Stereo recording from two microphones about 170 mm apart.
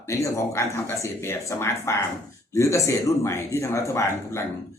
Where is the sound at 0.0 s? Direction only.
15° left (ahead or behind).